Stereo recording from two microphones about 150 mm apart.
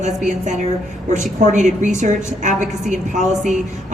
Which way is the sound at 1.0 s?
55° right (ahead or behind).